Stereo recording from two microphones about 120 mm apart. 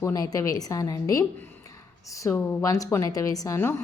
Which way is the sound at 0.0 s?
30° left (ahead or behind).